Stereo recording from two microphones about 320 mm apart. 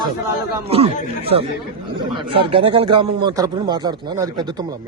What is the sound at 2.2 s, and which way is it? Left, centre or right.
A man's voice, centre.